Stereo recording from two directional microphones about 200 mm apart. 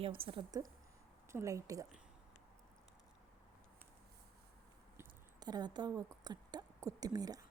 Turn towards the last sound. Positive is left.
turn(degrees=-20)  # may be behind; listen again after turning